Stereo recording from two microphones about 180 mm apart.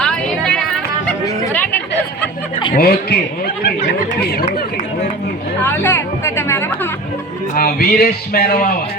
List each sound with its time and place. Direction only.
0.0 s a sound: 5° left (ahead or behind)
2.7 s speech: 55° left (ahead or behind)
5.6 s speech: 10° left (ahead or behind)
7.5 s speech: 60° left (ahead or behind)